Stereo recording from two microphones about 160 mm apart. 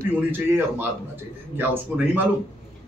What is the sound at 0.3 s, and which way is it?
A man's voice, 10° right (ahead or behind).